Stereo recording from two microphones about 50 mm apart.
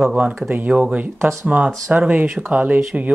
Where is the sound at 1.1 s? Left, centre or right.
Right.